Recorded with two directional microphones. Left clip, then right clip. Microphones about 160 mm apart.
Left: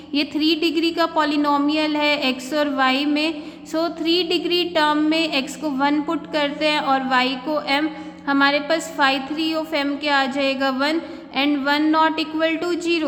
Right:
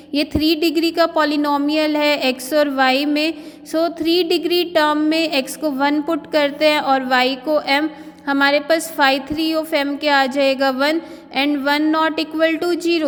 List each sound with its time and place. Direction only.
0.1 s a woman's voice: 35° right (ahead or behind)